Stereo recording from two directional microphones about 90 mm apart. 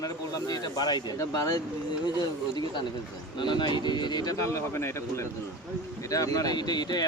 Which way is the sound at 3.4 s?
60° left (ahead or behind).